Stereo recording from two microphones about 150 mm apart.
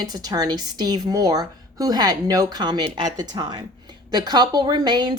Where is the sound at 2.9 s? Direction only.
45° right (ahead or behind).